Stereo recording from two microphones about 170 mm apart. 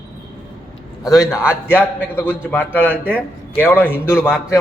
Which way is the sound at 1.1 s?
20° left (ahead or behind).